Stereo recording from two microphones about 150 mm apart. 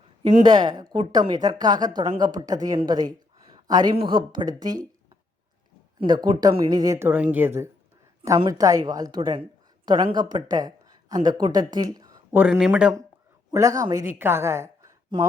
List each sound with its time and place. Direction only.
0.4 s speech: 30° right (ahead or behind)
3.5 s a sound: 30° right (ahead or behind)
3.9 s speech: 35° right (ahead or behind)
6.0 s a woman's voice: 30° right (ahead or behind)
12.3 s speech: 10° right (ahead or behind)
13.5 s speech: 20° right (ahead or behind)